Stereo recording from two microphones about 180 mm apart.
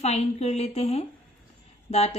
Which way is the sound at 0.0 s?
35° left (ahead or behind).